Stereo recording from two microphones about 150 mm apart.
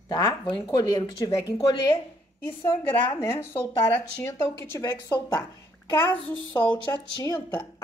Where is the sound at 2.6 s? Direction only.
20° left (ahead or behind).